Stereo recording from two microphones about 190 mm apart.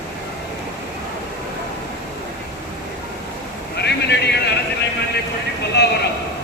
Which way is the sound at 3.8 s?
60° left (ahead or behind).